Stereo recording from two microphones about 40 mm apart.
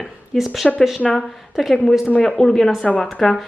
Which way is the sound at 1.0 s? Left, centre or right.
Left.